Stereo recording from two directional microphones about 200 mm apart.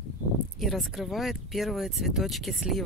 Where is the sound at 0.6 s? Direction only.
Centre (ahead or behind).